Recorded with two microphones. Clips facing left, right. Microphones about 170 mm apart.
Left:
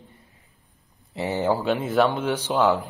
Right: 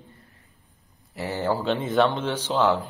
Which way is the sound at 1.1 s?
20° left (ahead or behind).